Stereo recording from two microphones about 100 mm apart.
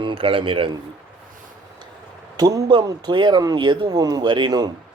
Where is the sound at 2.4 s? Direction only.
40° right (ahead or behind).